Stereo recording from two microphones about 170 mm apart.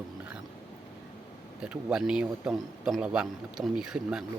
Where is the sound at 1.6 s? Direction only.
5° right (ahead or behind).